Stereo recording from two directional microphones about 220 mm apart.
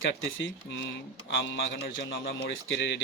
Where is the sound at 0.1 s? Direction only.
60° left (ahead or behind).